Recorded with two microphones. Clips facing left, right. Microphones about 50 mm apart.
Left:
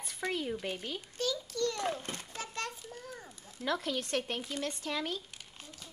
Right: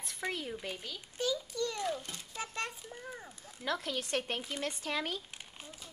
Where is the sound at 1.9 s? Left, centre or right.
Left.